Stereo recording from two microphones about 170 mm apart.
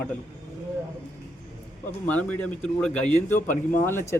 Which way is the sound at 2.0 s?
10° left (ahead or behind).